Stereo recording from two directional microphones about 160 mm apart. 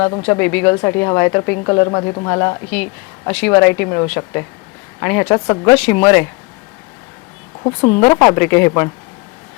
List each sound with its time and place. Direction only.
0.2 s speech: 10° left (ahead or behind)
7.7 s speech: 10° left (ahead or behind)